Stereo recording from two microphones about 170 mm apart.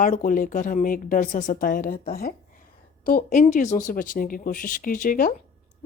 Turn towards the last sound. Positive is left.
turn(degrees=55)  # may be behind; listen again after turning